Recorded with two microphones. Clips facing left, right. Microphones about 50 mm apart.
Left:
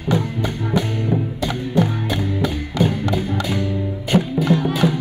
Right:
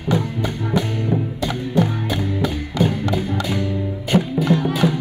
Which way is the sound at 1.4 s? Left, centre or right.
Left.